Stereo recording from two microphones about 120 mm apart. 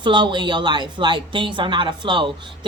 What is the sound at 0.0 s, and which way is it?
A woman's voice, 40° right (ahead or behind).